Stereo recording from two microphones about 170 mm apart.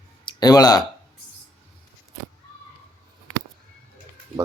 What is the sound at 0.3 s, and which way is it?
Speech, 25° left (ahead or behind).